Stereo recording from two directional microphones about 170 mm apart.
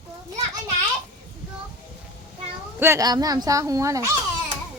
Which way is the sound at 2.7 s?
15° right (ahead or behind).